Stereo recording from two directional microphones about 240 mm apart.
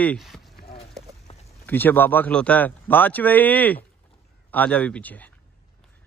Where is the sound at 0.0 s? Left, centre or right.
Centre.